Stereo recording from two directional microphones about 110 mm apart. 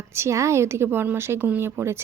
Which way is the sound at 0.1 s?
25° right (ahead or behind).